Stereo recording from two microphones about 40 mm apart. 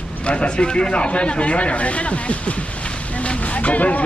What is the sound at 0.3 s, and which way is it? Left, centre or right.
Speech, left.